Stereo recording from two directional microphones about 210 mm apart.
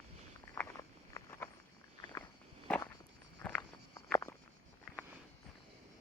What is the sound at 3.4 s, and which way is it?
Walk, 10° left (ahead or behind).